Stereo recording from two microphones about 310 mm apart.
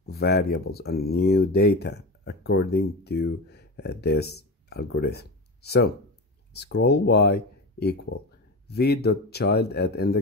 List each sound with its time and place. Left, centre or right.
0.0 s speech: left